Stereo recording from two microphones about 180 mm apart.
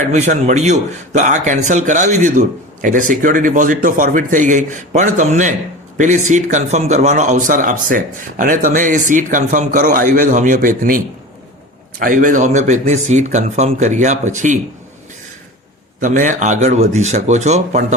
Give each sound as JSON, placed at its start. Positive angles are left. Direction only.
{"t": 0.0, "sound": "speech", "side_deg": -40}
{"t": 16.0, "sound": "speech", "side_deg": -45}